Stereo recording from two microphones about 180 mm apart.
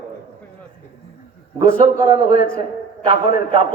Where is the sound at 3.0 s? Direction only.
30° right (ahead or behind).